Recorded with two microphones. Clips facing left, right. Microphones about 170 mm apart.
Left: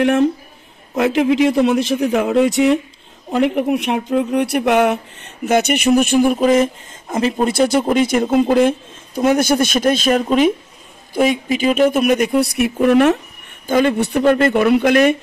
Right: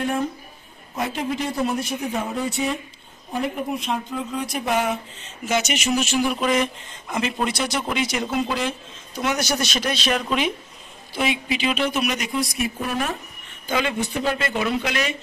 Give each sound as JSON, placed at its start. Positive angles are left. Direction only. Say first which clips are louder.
{"t": 0.9, "sound": "a man's voice", "louder": "left 11 dB", "side_deg": 85}
{"t": 3.3, "sound": "speech", "louder": "left 10 dB", "side_deg": 75}
{"t": 7.5, "sound": "speech", "louder": "left 11 dB", "side_deg": 50}
{"t": 13.7, "sound": "speech", "louder": "left 9 dB", "side_deg": 50}